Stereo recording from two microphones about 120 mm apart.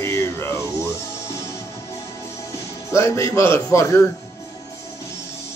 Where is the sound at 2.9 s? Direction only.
25° left (ahead or behind).